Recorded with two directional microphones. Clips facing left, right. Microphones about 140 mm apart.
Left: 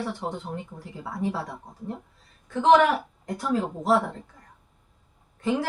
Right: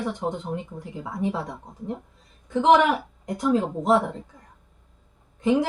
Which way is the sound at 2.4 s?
15° right (ahead or behind).